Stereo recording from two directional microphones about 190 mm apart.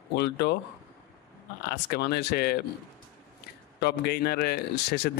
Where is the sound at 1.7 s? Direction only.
55° left (ahead or behind).